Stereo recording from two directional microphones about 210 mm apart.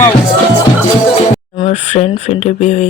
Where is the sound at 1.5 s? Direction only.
30° left (ahead or behind).